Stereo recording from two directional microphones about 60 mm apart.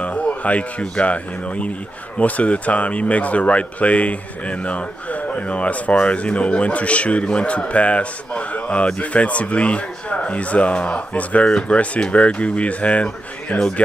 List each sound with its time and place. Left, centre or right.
0.0 s speech: left